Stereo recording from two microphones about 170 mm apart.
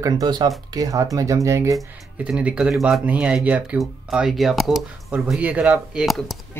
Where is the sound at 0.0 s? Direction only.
25° right (ahead or behind).